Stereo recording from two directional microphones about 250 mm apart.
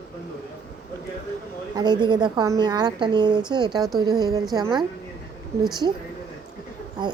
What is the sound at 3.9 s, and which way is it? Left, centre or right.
Speech, centre.